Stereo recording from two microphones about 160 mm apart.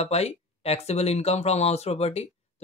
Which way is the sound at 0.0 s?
40° left (ahead or behind).